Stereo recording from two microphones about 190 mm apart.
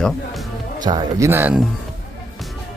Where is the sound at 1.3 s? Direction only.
10° right (ahead or behind).